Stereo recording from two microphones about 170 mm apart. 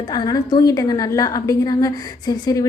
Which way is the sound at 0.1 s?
20° left (ahead or behind).